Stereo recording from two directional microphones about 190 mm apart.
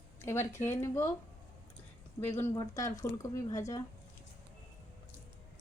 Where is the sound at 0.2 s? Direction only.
15° left (ahead or behind).